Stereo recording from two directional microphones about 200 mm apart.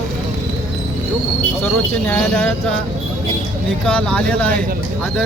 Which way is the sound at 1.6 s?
5° left (ahead or behind).